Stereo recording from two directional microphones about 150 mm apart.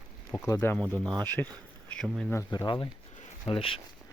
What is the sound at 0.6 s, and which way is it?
Speech, 10° left (ahead or behind).